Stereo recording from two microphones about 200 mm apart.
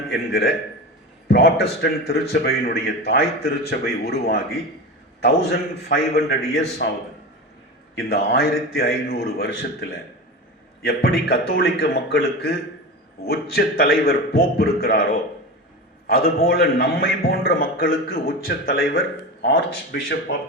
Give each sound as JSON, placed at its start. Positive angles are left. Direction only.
{"t": 0.1, "sound": "a man's voice", "side_deg": 55}
{"t": 7.9, "sound": "a man's voice", "side_deg": 55}